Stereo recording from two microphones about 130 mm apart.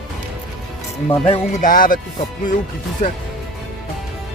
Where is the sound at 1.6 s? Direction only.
90° left.